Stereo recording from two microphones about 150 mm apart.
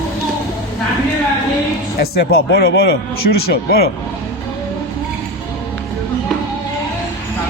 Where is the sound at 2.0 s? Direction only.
90° left.